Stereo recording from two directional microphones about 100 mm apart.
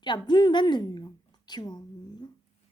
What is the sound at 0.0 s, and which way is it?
A woman's voice, 45° left (ahead or behind).